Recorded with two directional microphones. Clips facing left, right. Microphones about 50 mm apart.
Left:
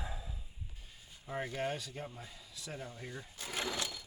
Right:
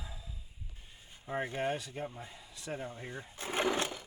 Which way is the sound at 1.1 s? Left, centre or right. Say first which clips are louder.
Right 3 dB; right.